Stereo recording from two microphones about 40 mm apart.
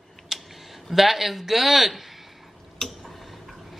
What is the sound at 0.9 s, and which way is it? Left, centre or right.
A man's voice, centre.